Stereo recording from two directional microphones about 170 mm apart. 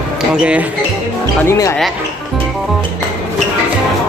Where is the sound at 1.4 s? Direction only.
15° left (ahead or behind).